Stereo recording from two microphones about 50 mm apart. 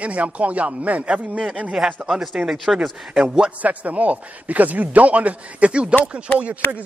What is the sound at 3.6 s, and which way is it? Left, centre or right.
A man's voice, right.